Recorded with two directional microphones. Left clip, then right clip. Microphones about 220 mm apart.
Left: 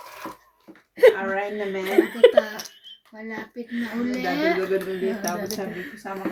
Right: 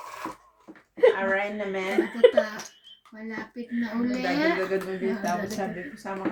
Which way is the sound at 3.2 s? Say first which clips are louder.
Left 2 dB; 5° right (ahead or behind).